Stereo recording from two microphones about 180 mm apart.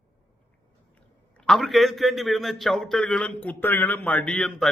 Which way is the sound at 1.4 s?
Centre (ahead or behind).